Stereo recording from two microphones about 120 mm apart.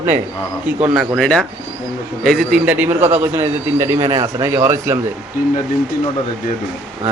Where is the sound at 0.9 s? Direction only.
Centre (ahead or behind).